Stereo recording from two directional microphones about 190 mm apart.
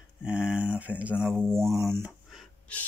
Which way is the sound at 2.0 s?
5° right (ahead or behind).